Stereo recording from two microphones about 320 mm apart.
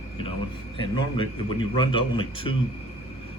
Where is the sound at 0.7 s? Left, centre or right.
Centre.